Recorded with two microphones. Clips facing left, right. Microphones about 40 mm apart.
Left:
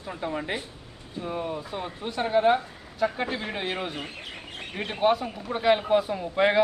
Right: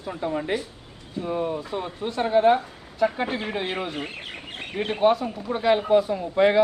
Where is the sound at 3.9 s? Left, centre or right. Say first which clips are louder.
Right 3 dB; right.